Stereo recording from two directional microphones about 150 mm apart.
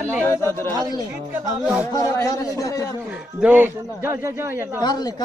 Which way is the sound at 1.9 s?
20° left (ahead or behind).